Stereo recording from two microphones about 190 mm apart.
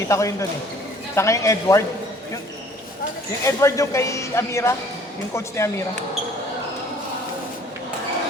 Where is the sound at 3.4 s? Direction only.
15° left (ahead or behind).